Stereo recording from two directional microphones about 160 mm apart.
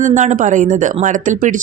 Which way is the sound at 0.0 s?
50° right (ahead or behind).